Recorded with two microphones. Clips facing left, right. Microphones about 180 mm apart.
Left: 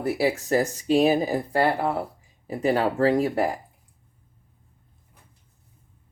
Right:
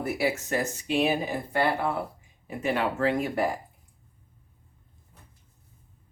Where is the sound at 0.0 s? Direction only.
30° left (ahead or behind).